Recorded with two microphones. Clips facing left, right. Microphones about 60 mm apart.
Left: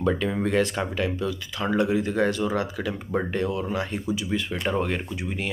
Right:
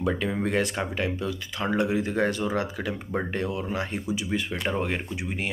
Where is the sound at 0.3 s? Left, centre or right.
Right.